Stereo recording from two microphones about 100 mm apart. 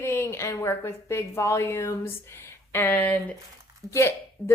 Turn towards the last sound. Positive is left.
turn(degrees=25)  # may be behind; listen again after turning